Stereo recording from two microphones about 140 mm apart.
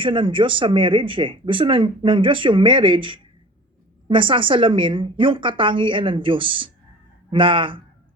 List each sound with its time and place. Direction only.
0.0 s speech: 35° right (ahead or behind)